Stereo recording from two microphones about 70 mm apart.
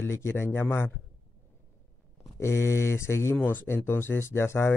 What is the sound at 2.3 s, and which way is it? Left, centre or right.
Speech, left.